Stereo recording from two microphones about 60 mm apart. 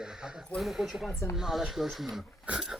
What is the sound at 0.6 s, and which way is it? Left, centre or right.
Speech, centre.